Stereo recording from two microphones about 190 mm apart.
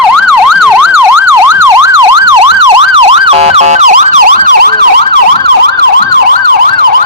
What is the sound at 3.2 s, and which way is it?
Emergency vehicle, 30° right (ahead or behind).